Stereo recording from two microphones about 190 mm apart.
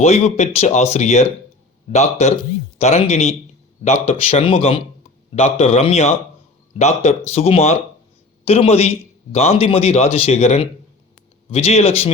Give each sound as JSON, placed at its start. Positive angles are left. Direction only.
{"t": 0.0, "sound": "a man's voice", "side_deg": 35}